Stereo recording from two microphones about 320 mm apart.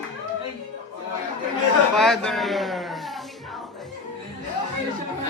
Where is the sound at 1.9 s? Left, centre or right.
Centre.